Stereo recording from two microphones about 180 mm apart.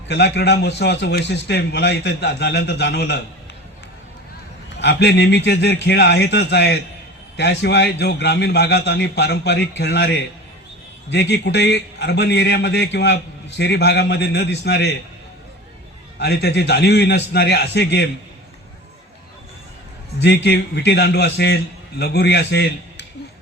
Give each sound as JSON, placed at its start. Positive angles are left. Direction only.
{"t": 0.1, "sound": "a man's voice", "side_deg": 75}
{"t": 4.8, "sound": "a man's voice", "side_deg": 70}
{"t": 16.1, "sound": "a man's voice", "side_deg": 65}
{"t": 20.2, "sound": "a man's voice", "side_deg": 70}